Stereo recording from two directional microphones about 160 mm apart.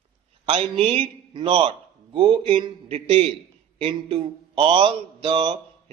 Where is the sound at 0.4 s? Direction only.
35° right (ahead or behind).